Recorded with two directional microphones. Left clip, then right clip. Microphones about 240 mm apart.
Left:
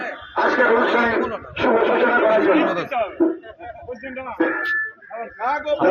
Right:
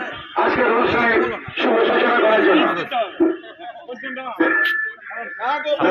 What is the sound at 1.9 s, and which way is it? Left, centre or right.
Speech, left.